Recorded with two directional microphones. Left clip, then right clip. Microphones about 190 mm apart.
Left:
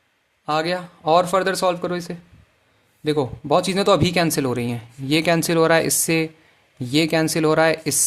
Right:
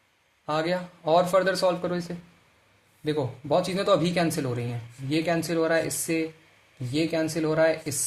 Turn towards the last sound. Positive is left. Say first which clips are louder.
# left 6 dB
turn(degrees=40)  # may be behind; listen again after turning